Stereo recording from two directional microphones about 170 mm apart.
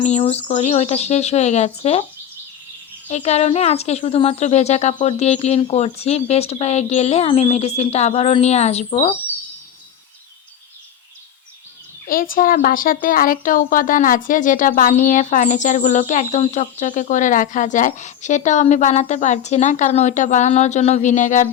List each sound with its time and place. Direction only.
0.0 s speech: 40° left (ahead or behind)
3.1 s speech: 40° left (ahead or behind)
12.0 s speech: 55° left (ahead or behind)